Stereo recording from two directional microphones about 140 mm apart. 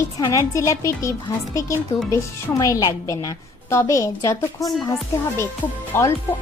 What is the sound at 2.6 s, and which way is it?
A woman's voice, 25° left (ahead or behind).